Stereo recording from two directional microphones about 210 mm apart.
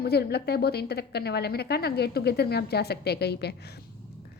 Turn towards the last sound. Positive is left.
turn(degrees=50)  # may be behind; listen again after turning